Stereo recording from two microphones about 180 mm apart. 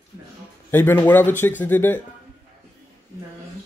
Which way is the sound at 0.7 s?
10° left (ahead or behind).